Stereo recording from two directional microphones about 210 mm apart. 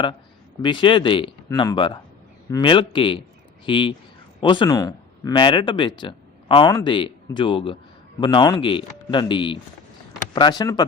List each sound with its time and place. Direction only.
0.6 s speech: 25° left (ahead or behind)